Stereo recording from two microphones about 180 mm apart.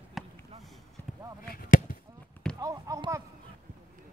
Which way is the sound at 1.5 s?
55° left (ahead or behind).